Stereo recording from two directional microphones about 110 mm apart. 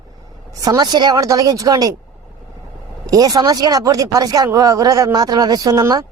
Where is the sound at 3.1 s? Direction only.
35° right (ahead or behind).